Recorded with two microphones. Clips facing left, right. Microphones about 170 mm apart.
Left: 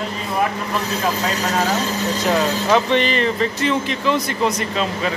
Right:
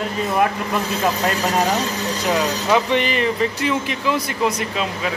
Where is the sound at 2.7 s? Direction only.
10° right (ahead or behind).